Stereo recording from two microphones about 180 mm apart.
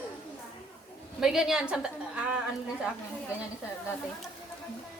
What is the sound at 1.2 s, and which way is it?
A woman's voice, 5° right (ahead or behind).